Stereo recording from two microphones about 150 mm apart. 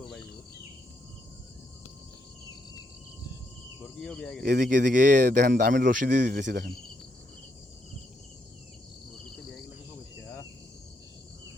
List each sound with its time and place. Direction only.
4.0 s speech: 5° left (ahead or behind)
4.4 s speech: 60° right (ahead or behind)
9.1 s cricket: centre (ahead or behind)